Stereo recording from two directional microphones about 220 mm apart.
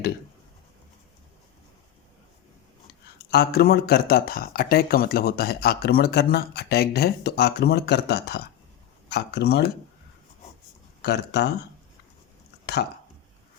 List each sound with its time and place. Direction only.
3.2 s speech: 45° left (ahead or behind)
11.0 s speech: 50° left (ahead or behind)